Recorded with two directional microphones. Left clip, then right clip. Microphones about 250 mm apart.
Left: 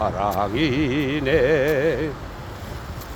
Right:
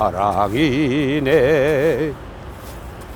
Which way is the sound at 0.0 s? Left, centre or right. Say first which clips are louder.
Right 5 dB; right.